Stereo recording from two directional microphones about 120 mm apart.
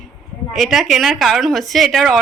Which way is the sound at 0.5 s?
Centre (ahead or behind).